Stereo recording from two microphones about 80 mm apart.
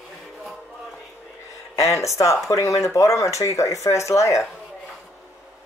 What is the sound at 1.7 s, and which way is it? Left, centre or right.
Speech, left.